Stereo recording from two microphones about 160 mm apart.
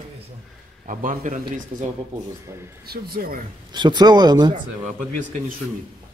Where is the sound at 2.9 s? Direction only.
65° right (ahead or behind).